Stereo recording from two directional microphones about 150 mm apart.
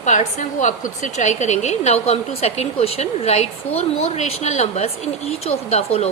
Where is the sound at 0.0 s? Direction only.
55° left (ahead or behind).